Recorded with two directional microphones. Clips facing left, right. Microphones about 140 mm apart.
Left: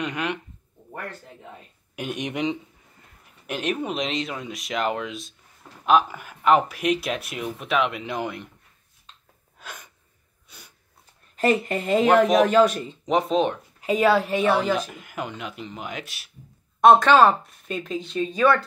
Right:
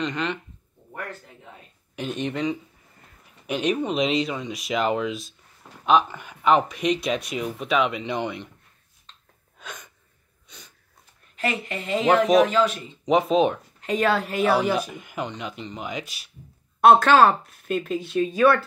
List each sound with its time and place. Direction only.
0.0 s speech: 10° left (ahead or behind)
2.0 s speech: 10° left (ahead or behind)
3.4 s speech: centre (ahead or behind)
9.6 s sneeze: 5° left (ahead or behind)
11.3 s speech: 45° left (ahead or behind)
13.0 s speech: centre (ahead or behind)
13.7 s speech: 5° left (ahead or behind); by 14.9 s 10° right (ahead or behind)
14.9 s speech: centre (ahead or behind)